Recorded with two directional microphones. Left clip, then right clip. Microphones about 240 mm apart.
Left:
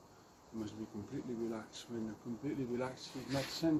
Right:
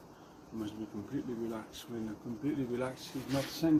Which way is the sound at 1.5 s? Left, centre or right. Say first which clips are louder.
Right 3 dB; centre.